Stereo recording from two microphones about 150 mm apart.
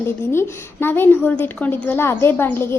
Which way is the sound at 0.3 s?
15° left (ahead or behind).